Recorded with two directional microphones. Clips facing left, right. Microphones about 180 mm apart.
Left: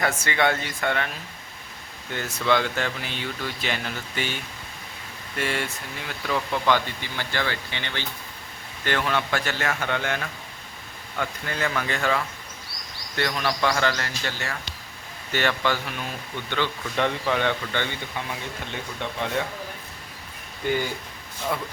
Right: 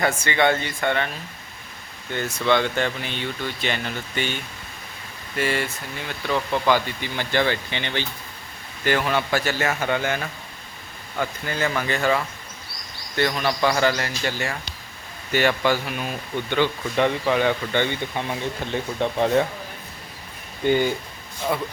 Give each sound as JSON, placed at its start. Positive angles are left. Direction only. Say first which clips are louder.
{"t": 0.0, "sound": "speech", "louder": "right 3 dB", "side_deg": 0}
{"t": 2.1, "sound": "speech", "louder": "right 2 dB", "side_deg": 0}
{"t": 5.4, "sound": "speech", "louder": "right 4 dB", "side_deg": 0}
{"t": 8.8, "sound": "speech", "louder": "right 3 dB", "side_deg": -10}
{"t": 17.7, "sound": "speech", "louder": "right 6 dB", "side_deg": -20}
{"t": 20.6, "sound": "speech", "louder": "right 5 dB", "side_deg": -25}